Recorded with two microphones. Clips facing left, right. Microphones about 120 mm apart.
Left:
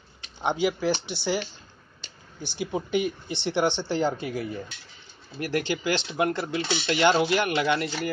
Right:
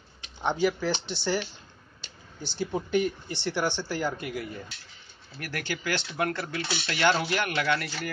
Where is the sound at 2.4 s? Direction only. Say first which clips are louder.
Left 1 dB; 15° left (ahead or behind).